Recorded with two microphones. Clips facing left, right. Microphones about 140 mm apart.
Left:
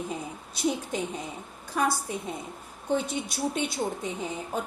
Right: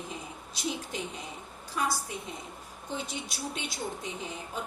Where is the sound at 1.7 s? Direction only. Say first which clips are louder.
Left 5 dB; 55° left (ahead or behind).